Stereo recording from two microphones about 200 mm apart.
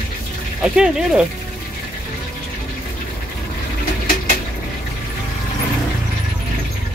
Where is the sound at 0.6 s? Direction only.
5° right (ahead or behind).